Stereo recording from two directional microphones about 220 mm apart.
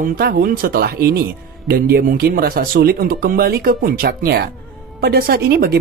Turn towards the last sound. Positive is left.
turn(degrees=-45)  # may be behind; listen again after turning